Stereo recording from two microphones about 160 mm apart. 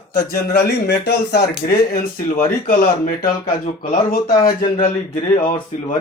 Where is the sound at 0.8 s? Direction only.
90° left.